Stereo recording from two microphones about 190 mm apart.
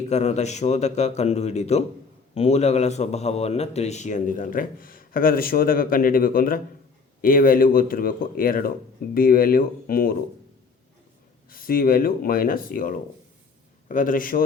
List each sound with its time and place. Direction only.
0.1 s a man's voice: 35° left (ahead or behind)
11.4 s a man's voice: 50° left (ahead or behind)